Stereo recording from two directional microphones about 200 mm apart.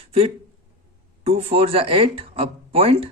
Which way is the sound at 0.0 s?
30° right (ahead or behind).